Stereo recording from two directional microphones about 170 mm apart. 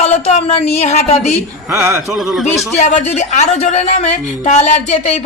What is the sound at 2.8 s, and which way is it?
Speech, 45° left (ahead or behind).